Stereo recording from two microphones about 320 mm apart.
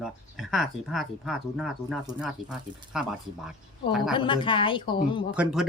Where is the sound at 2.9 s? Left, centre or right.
Centre.